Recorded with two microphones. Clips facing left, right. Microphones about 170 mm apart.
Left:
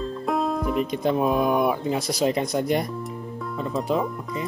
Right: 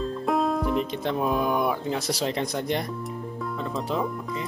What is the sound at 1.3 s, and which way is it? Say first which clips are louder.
Speech: left 3 dB; 10° left (ahead or behind).